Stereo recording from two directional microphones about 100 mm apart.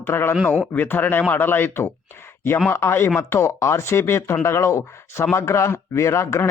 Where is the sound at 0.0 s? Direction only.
25° left (ahead or behind).